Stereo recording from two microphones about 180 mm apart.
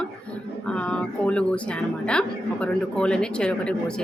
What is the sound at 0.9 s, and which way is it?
Speech, 5° left (ahead or behind).